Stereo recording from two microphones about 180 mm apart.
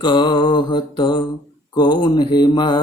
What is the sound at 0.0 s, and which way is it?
Mantra, 25° left (ahead or behind).